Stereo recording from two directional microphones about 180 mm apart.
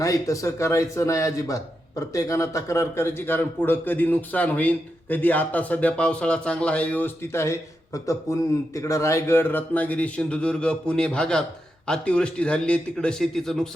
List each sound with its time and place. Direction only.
0.0 s speech: 20° left (ahead or behind); by 13.7 s 5° left (ahead or behind)